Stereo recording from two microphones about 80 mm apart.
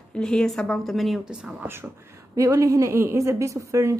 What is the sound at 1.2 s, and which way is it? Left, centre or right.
Speech, centre.